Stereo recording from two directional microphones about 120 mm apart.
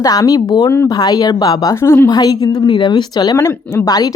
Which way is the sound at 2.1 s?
30° left (ahead or behind).